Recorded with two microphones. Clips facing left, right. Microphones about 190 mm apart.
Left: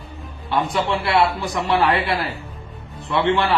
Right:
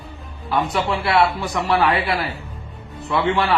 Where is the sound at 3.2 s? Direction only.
25° left (ahead or behind).